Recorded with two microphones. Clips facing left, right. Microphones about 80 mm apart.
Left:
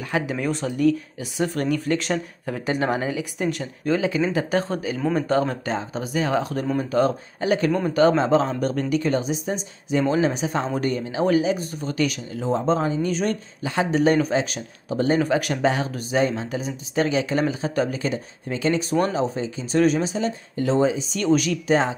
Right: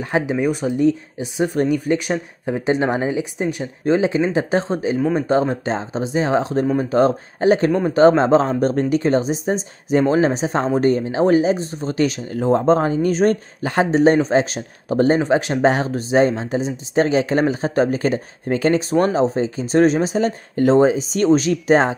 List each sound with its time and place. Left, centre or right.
0.1 s a woman's voice: centre; by 15.1 s right
15.1 s a woman's voice: right